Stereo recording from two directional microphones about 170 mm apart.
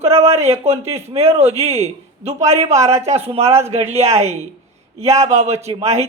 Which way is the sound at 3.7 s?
40° right (ahead or behind).